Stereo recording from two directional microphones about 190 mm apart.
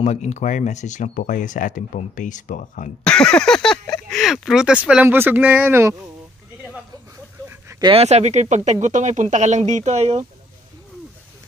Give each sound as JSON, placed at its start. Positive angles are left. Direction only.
{"t": 0.0, "sound": "speech", "side_deg": 40}
{"t": 3.1, "sound": "speech", "side_deg": 5}
{"t": 7.8, "sound": "speech", "side_deg": -30}